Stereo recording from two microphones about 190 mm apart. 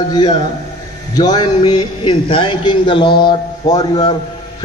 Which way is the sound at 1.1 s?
20° left (ahead or behind).